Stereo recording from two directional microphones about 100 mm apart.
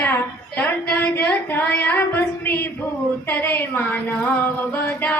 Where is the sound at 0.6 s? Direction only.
20° left (ahead or behind).